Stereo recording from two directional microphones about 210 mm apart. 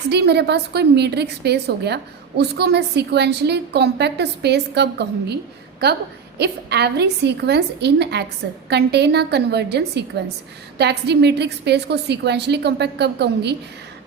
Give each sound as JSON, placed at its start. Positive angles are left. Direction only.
{"t": 0.1, "sound": "a woman's voice", "side_deg": -50}